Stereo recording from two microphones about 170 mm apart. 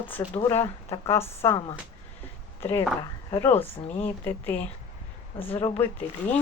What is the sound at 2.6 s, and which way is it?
Speech, 15° left (ahead or behind).